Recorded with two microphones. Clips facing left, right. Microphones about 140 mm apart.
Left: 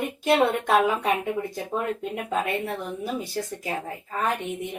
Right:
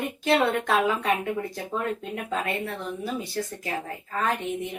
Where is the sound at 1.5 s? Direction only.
15° left (ahead or behind).